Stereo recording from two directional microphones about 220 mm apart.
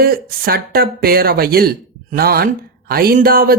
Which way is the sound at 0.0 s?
40° right (ahead or behind).